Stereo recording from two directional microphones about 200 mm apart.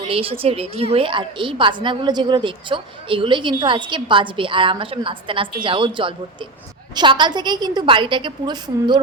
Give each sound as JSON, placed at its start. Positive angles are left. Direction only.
{"t": 0.0, "sound": "a woman's voice", "side_deg": -30}